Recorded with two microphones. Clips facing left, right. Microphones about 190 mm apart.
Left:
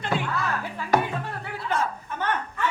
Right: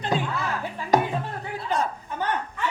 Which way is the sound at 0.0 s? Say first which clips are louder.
Right 1 dB; 20° right (ahead or behind).